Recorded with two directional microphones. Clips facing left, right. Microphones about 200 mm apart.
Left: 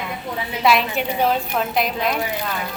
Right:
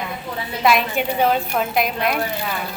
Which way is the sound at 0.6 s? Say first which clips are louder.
Right 1 dB; centre (ahead or behind).